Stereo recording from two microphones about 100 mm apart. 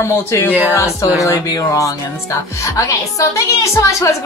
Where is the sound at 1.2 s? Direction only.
35° left (ahead or behind).